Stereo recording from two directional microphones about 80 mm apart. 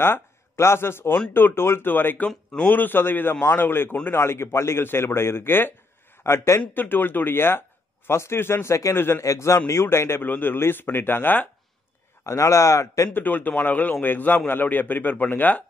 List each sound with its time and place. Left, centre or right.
0.0 s a man's voice: left
12.3 s a man's voice: left
13.1 s speech: left